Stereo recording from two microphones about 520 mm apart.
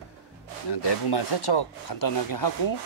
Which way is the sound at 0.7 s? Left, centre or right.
Left.